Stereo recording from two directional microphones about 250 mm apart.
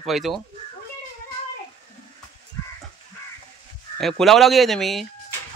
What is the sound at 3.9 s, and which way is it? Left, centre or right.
Speech, centre.